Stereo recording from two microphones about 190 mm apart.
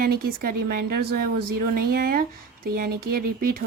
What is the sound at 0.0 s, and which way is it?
Speech, 50° right (ahead or behind).